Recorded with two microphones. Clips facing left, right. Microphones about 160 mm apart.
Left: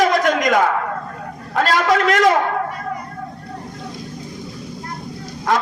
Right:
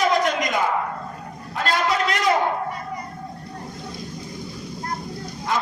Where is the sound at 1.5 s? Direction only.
75° left (ahead or behind).